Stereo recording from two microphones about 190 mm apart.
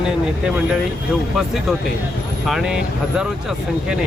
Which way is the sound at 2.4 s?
5° right (ahead or behind).